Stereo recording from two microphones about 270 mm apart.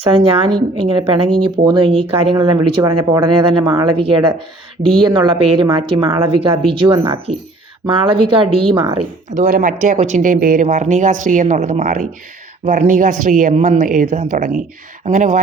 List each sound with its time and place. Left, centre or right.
0.0 s a woman's voice: right